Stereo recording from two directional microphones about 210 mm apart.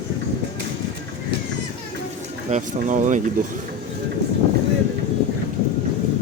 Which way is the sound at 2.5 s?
35° right (ahead or behind).